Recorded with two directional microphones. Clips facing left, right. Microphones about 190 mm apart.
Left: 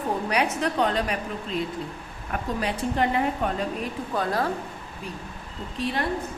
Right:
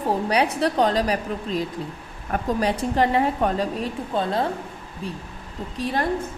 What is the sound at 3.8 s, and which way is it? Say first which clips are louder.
Speech: right 3 dB; 25° right (ahead or behind).